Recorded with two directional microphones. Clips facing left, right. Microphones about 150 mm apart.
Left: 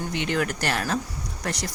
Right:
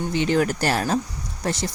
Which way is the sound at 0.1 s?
35° right (ahead or behind).